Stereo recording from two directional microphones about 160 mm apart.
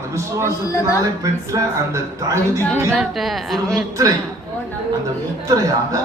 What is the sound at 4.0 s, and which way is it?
Speech, 25° right (ahead or behind).